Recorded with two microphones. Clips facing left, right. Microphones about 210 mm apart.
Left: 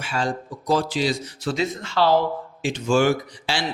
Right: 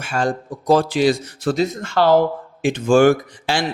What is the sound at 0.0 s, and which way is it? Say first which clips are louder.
Speech: right 4 dB; 50° right (ahead or behind).